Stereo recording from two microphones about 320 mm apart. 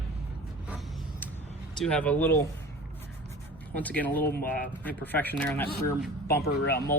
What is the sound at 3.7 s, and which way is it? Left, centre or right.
Speech, centre.